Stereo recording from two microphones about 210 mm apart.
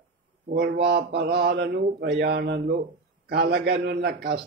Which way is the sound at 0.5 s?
40° right (ahead or behind).